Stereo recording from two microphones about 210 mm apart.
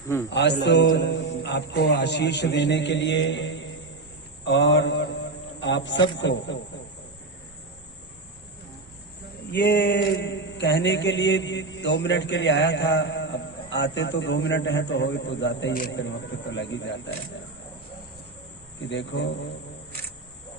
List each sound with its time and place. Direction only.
0.3 s a man's voice: 55° left (ahead or behind)
9.5 s a man's voice: 55° left (ahead or behind)
18.8 s a man's voice: 60° left (ahead or behind)